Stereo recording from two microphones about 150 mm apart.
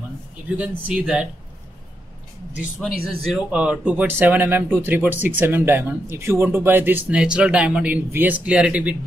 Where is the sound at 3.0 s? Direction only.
5° right (ahead or behind).